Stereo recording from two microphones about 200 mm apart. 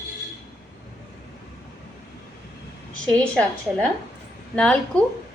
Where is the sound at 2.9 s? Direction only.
5° left (ahead or behind).